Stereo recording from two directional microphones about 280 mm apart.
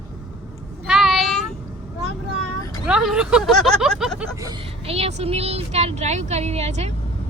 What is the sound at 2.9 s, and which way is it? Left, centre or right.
Speech, centre.